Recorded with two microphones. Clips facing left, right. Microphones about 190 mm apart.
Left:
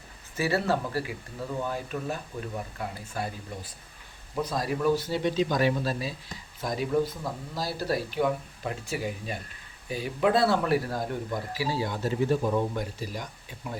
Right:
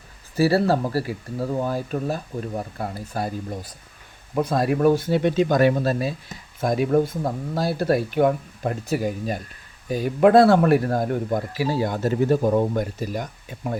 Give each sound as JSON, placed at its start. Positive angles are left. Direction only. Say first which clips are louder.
{"t": 0.3, "sound": "speech", "louder": "right 8 dB", "side_deg": -35}
{"t": 4.4, "sound": "speech", "louder": "right 8 dB", "side_deg": -60}